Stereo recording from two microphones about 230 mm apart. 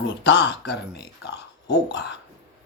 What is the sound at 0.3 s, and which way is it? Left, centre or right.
Speech, left.